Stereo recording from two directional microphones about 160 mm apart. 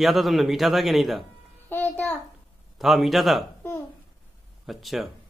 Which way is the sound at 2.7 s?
Centre (ahead or behind).